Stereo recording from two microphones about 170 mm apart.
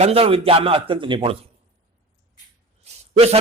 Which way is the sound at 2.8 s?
40° right (ahead or behind).